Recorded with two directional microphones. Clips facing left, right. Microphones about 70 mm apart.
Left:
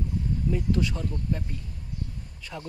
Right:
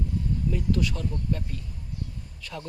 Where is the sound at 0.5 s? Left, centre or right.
Left.